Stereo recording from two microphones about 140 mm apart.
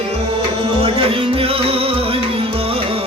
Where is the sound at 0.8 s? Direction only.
40° right (ahead or behind).